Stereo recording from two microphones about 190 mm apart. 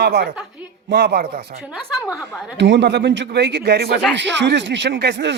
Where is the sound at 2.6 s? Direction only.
65° right (ahead or behind).